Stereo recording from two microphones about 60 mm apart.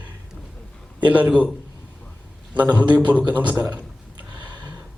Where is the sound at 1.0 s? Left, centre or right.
Right.